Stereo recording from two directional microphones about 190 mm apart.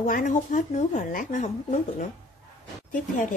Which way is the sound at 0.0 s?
45° left (ahead or behind).